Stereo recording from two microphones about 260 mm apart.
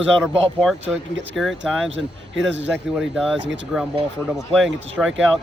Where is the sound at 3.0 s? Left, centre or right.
Centre.